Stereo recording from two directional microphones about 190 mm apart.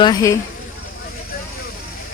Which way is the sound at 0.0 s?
20° left (ahead or behind).